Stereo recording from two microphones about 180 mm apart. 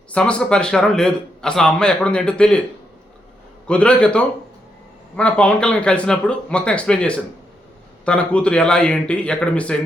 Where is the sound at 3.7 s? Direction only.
5° left (ahead or behind).